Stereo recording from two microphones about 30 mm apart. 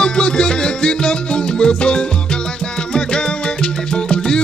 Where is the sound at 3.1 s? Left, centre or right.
Left.